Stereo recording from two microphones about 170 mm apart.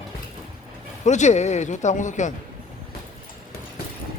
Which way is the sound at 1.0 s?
45° left (ahead or behind).